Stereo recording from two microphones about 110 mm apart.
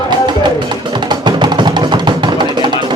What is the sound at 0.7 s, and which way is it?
Music, 40° right (ahead or behind).